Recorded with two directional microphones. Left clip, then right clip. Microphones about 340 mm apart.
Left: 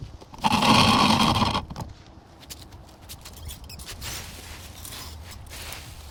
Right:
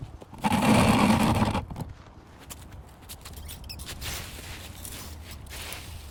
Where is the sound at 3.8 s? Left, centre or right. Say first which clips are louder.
Left 1 dB; centre.